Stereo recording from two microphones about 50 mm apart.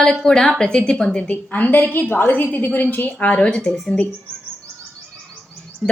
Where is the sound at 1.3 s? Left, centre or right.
Left.